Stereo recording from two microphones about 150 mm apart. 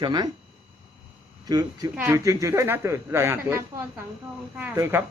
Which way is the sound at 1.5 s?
25° right (ahead or behind).